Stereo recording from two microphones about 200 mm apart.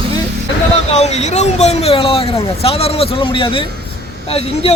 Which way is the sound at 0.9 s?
35° left (ahead or behind).